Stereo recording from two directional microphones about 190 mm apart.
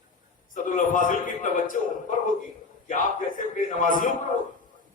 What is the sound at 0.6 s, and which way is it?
A man's voice, 45° left (ahead or behind).